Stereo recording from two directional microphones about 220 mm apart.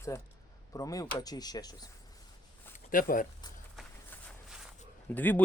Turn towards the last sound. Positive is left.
turn(degrees=10)  # may be behind; listen again after turning